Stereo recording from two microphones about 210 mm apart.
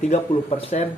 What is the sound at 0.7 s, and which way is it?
Speech, 35° left (ahead or behind).